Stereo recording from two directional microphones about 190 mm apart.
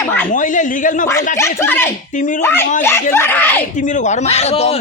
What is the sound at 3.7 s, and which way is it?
Speech, 40° left (ahead or behind).